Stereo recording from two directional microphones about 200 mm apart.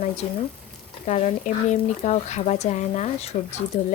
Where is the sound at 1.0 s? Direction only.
35° left (ahead or behind).